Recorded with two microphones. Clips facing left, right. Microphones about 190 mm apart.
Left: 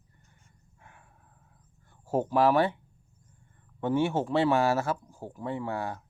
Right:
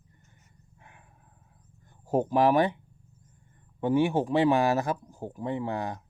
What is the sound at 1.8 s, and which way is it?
Speech, 15° right (ahead or behind).